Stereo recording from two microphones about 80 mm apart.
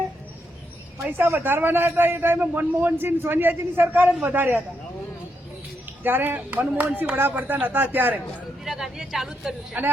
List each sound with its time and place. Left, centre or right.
1.0 s a man's voice: right
6.0 s a man's voice: right
8.6 s a woman's voice: centre